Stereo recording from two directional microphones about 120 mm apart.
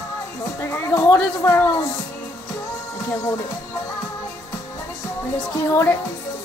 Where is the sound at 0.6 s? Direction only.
20° left (ahead or behind).